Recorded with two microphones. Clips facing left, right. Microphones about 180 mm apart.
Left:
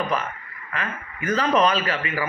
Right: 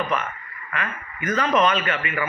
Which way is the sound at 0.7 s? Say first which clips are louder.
Even; 30° left (ahead or behind).